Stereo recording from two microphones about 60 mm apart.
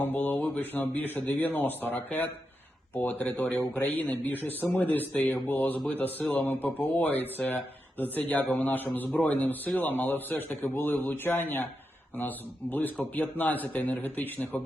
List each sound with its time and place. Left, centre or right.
0.0 s speech: left
12.7 s speech: left